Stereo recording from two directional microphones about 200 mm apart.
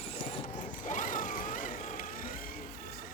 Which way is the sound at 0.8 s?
40° left (ahead or behind).